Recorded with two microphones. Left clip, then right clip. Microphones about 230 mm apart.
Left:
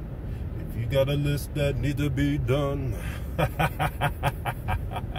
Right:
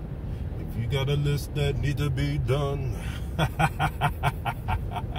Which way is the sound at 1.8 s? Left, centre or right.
Left.